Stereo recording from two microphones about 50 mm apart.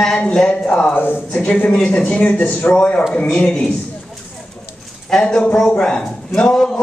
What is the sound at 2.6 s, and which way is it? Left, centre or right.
A man's voice, left.